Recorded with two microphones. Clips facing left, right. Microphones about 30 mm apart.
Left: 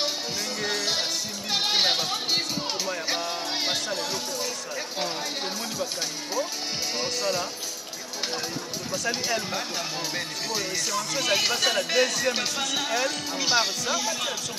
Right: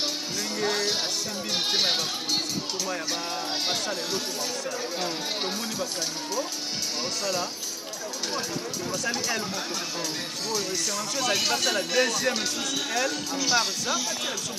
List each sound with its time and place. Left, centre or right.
1.5 s goat: left
2.2 s speech: left
7.0 s speech: centre
8.9 s speech: centre
11.1 s speech: centre
12.4 s speech: left
12.9 s speech: centre
13.4 s speech: centre